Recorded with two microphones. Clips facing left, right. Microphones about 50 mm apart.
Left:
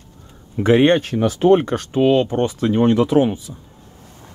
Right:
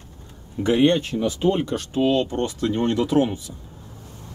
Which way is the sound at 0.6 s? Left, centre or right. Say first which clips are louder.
Left 4 dB; left.